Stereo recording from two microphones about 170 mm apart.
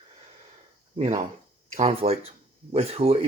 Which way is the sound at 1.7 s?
35° right (ahead or behind).